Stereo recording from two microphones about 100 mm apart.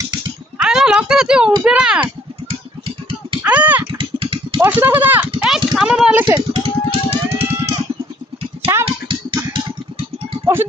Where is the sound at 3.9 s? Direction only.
55° right (ahead or behind).